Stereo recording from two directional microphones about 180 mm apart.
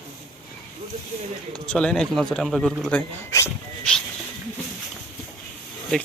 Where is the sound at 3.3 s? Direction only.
15° left (ahead or behind).